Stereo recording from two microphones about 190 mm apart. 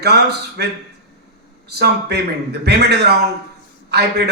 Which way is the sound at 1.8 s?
60° right (ahead or behind).